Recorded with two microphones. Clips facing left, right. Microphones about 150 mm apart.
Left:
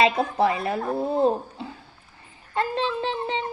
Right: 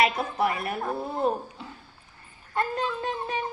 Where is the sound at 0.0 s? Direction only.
25° left (ahead or behind).